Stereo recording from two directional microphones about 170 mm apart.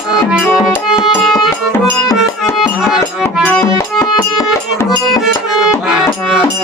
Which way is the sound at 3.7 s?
20° left (ahead or behind).